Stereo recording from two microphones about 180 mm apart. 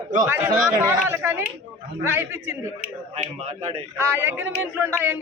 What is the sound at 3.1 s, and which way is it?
Speech, 35° right (ahead or behind).